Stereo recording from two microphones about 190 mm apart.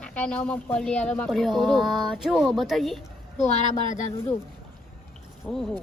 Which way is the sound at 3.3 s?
35° left (ahead or behind).